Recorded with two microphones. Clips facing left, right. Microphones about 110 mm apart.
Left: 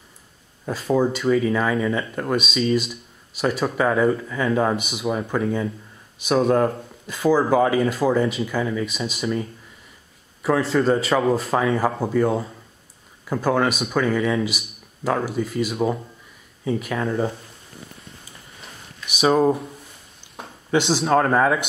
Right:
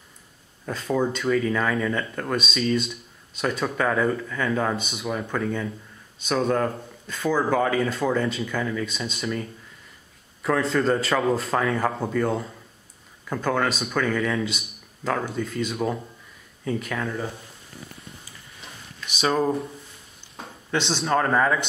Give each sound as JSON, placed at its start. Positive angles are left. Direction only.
{"t": 0.7, "sound": "speech", "side_deg": 5}
{"t": 17.0, "sound": "speech", "side_deg": 25}
{"t": 19.0, "sound": "speech", "side_deg": 15}
{"t": 20.7, "sound": "speech", "side_deg": 10}